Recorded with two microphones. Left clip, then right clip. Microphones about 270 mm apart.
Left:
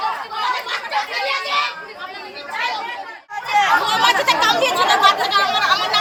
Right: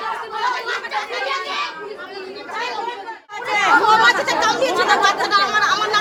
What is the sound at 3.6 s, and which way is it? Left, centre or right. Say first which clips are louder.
Chatter: right 2 dB; right.